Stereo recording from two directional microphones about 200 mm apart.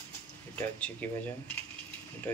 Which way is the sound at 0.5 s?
10° left (ahead or behind).